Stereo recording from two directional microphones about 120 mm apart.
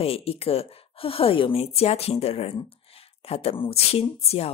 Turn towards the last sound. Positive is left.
turn(degrees=55)  # may be behind; listen again after turning